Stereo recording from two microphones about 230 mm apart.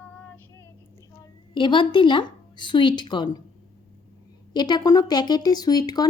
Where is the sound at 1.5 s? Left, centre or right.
Left.